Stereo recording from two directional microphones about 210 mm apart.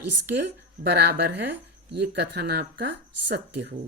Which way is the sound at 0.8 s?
50° right (ahead or behind).